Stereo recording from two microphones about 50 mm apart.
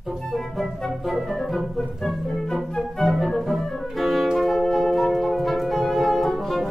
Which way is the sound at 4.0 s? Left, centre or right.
Centre.